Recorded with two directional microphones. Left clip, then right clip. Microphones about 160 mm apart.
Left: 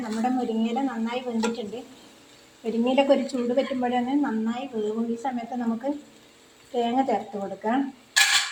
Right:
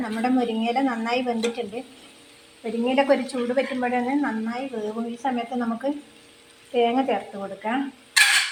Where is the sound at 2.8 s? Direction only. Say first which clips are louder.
Right 1 dB; 25° left (ahead or behind).